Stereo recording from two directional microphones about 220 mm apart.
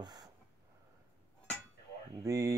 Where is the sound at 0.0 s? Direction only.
20° right (ahead or behind).